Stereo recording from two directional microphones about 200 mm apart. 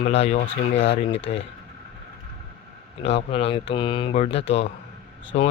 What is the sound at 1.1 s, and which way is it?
Speech, 60° left (ahead or behind).